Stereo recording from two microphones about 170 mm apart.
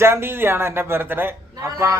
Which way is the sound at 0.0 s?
15° right (ahead or behind).